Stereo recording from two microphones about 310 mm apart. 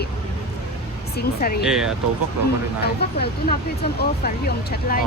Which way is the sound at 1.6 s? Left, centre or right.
Centre.